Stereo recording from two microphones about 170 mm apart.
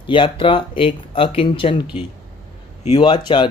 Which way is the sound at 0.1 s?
30° left (ahead or behind).